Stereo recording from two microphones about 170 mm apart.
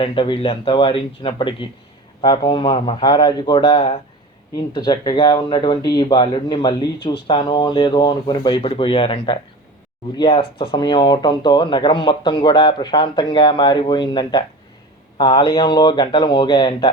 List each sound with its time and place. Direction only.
0.0 s speech: 30° left (ahead or behind)